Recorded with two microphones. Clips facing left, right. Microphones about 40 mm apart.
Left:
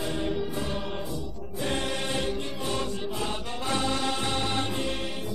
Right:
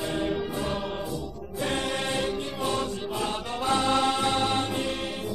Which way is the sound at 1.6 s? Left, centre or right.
Right.